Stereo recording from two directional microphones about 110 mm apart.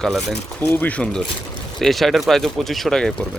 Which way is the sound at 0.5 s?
15° left (ahead or behind).